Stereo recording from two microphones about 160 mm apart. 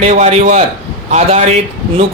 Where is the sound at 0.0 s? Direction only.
45° right (ahead or behind).